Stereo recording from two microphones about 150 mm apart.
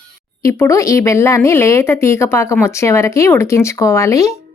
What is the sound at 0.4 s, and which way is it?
A woman's voice, 20° left (ahead or behind).